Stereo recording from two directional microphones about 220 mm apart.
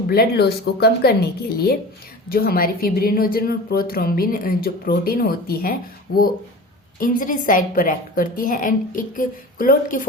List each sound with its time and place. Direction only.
0.1 s a woman's voice: 45° left (ahead or behind)